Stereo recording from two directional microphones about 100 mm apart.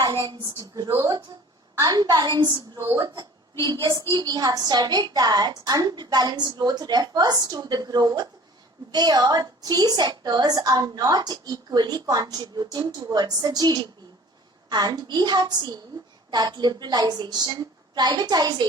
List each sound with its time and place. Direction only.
0.0 s a woman's voice: 45° right (ahead or behind)